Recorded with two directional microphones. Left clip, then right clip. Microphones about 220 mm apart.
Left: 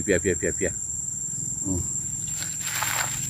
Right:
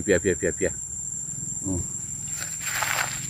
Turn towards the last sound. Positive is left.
turn(degrees=0)  # may be behind; listen again after turning